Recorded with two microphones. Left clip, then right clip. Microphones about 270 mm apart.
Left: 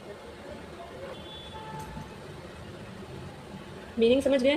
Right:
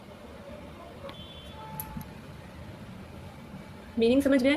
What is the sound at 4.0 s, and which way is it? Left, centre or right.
Speech, right.